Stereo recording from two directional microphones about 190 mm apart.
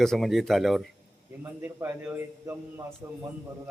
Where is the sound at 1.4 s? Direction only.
15° right (ahead or behind).